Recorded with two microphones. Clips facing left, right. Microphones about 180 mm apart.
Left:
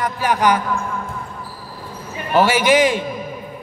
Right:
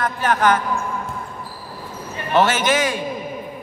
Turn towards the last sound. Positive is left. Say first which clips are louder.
# left 5 dB
turn(degrees=20)  # may be behind; listen again after turning